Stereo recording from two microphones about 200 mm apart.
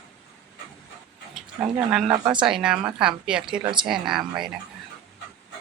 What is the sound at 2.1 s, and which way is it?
Speech, 25° right (ahead or behind).